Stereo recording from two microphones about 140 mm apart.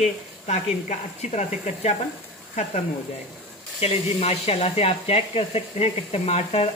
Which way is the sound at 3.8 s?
45° left (ahead or behind).